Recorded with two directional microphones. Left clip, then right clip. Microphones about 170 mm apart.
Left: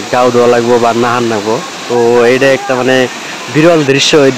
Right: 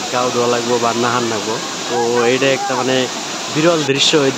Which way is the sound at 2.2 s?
30° left (ahead or behind).